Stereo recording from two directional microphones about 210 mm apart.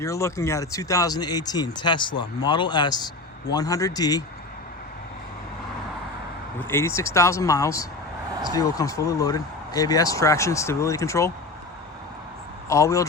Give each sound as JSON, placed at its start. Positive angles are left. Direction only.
{"t": 0.0, "sound": "speech", "side_deg": 15}
{"t": 6.6, "sound": "speech", "side_deg": 10}
{"t": 12.6, "sound": "speech", "side_deg": 15}